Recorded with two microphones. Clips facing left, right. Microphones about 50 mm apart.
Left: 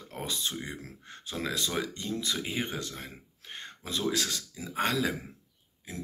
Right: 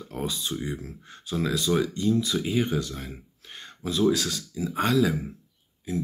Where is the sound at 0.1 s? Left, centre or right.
Left.